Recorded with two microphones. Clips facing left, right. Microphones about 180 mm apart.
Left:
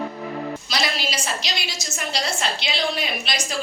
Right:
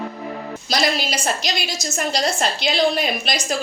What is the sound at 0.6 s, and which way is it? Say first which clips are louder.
A woman's voice: right 9 dB; 45° right (ahead or behind).